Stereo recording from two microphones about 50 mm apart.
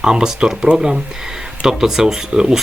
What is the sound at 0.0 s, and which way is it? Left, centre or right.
Speech, centre.